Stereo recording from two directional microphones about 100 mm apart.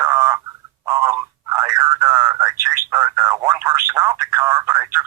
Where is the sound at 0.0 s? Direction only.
30° right (ahead or behind).